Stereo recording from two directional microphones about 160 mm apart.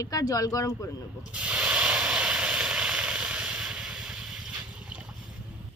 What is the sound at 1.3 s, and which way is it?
Vehicle, 10° right (ahead or behind).